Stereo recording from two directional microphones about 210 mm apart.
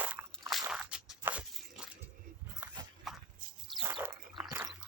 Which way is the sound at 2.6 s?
10° right (ahead or behind).